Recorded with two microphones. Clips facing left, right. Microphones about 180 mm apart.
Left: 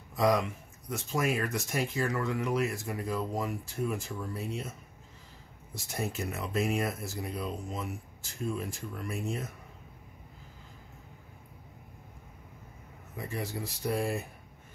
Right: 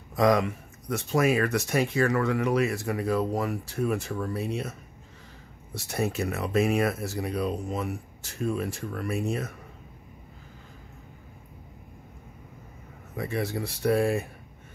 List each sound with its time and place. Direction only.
0.1 s speech: 75° right (ahead or behind)
5.8 s speech: 70° right (ahead or behind)
13.1 s speech: 75° right (ahead or behind)